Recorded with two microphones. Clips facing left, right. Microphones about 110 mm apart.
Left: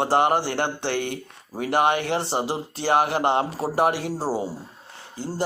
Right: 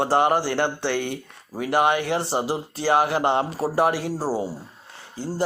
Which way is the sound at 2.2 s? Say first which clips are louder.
Right 1 dB; 25° left (ahead or behind).